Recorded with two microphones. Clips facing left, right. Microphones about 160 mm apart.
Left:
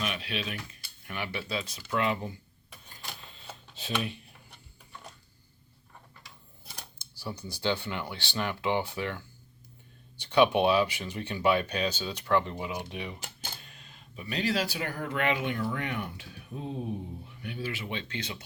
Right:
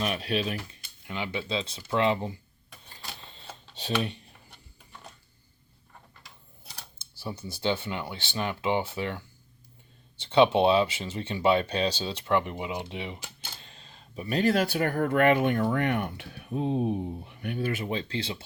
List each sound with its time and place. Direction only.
0.0 s speech: 40° right (ahead or behind)
1.0 s speech: 20° right (ahead or behind)
3.8 s speech: 35° right (ahead or behind)
7.2 s speech: 25° right (ahead or behind)